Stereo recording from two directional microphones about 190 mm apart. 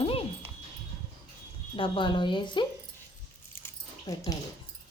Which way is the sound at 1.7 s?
25° left (ahead or behind).